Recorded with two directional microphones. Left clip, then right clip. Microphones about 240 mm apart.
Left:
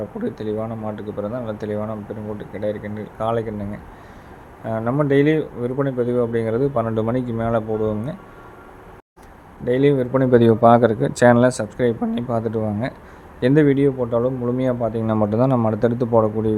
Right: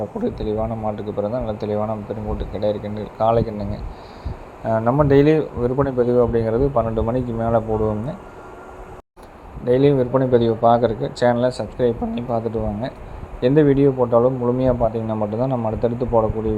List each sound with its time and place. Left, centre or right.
0.2 s speech: centre
9.6 s speech: centre
10.3 s a man's voice: left